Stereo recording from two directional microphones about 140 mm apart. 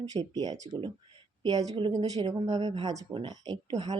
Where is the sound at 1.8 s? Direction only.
30° right (ahead or behind).